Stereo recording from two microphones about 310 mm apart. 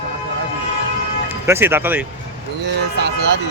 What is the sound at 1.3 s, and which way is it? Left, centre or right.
Speech, centre.